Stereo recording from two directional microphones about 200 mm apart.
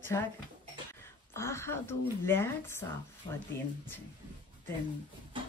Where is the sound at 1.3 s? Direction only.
15° left (ahead or behind).